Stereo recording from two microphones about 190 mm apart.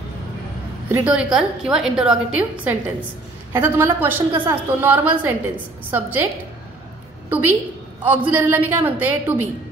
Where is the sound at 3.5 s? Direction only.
10° right (ahead or behind).